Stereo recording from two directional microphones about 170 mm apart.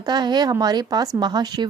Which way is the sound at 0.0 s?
25° right (ahead or behind).